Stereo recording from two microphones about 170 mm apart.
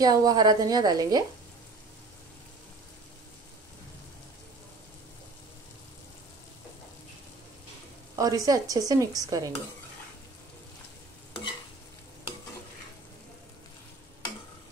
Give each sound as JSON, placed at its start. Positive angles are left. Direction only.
{"t": 0.0, "sound": "a woman's voice", "side_deg": -20}
{"t": 8.2, "sound": "a woman's voice", "side_deg": -20}